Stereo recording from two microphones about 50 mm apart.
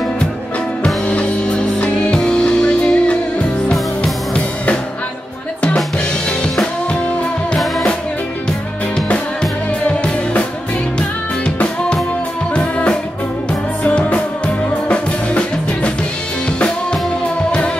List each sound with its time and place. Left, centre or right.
0.8 s music: left
8.9 s music: centre